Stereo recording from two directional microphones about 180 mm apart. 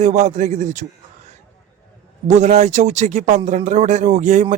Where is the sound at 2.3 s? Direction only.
40° right (ahead or behind).